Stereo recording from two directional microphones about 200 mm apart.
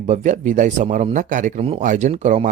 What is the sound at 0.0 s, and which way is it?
Speech, 35° right (ahead or behind).